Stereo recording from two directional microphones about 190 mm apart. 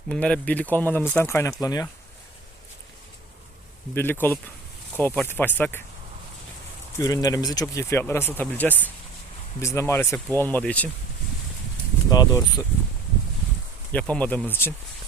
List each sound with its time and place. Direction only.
0.1 s speech: 5° left (ahead or behind)
3.9 s speech: 10° left (ahead or behind)
7.0 s speech: 20° left (ahead or behind)
12.1 s speech: 20° left (ahead or behind)
13.9 s speech: 5° left (ahead or behind)